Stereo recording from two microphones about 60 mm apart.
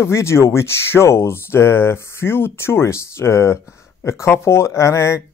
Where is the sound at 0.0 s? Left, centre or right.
Left.